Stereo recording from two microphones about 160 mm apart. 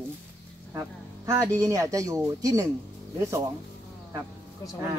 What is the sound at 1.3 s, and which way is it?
Speech, 20° right (ahead or behind).